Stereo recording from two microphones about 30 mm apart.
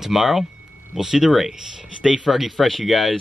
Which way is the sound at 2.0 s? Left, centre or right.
Right.